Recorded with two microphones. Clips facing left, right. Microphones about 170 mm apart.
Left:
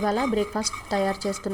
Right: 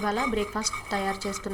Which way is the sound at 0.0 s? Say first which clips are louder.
Left 4 dB; 35° left (ahead or behind).